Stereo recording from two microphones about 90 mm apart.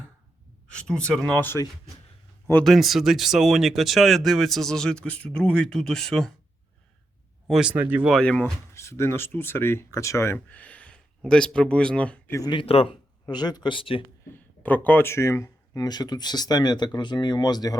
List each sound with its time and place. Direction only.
0.7 s speech: 10° left (ahead or behind)
1.3 s speech: 20° left (ahead or behind)
2.6 s speech: centre (ahead or behind)
7.6 s speech: 15° right (ahead or behind)
8.2 s speech: 10° left (ahead or behind)
8.7 s speech: 30° left (ahead or behind)
10.3 s speech: 15° left (ahead or behind)
12.5 s a man's voice: 90° left
13.3 s speech: 50° left (ahead or behind)
13.7 s speech: 80° left
14.6 s speech: 20° left (ahead or behind); by 17.7 s 50° left (ahead or behind)